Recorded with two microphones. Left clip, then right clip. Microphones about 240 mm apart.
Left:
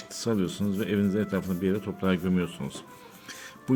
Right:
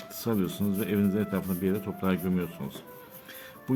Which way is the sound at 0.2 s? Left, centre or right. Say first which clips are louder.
Left 2 dB; centre.